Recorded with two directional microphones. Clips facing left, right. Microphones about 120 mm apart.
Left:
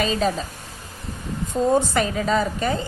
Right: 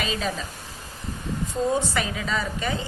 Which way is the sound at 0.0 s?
40° left (ahead or behind).